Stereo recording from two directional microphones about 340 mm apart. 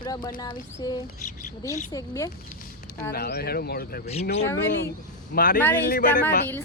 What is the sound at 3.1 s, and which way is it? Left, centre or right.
Speech, left.